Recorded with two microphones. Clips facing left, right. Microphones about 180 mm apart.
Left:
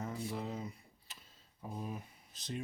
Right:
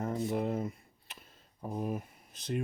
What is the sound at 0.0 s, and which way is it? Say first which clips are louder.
Speech: right 8 dB; 50° right (ahead or behind).